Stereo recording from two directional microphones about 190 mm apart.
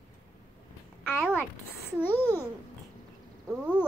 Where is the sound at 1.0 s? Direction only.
Centre (ahead or behind).